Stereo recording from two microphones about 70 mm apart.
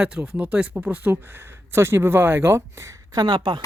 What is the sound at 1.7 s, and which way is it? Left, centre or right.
Speech, right.